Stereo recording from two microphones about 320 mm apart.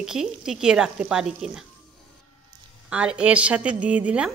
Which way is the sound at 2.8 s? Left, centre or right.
Centre.